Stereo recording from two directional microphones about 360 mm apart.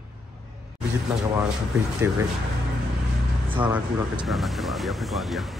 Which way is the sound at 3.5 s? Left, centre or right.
Centre.